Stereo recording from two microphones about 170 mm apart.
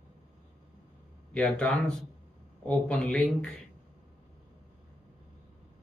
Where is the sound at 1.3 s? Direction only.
5° left (ahead or behind).